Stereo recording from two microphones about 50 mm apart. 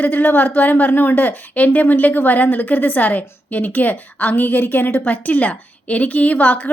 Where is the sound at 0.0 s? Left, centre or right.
Left.